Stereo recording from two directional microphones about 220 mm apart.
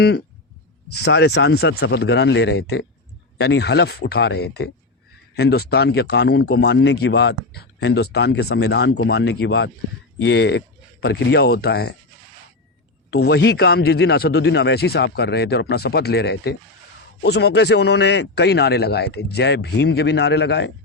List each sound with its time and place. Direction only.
0.9 s speech: 50° left (ahead or behind)
13.1 s speech: 50° left (ahead or behind)